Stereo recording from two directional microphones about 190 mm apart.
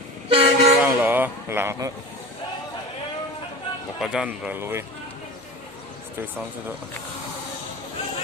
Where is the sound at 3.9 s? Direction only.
5° right (ahead or behind).